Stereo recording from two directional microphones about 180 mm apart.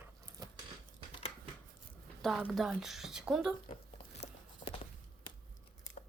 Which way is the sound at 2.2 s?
Centre (ahead or behind).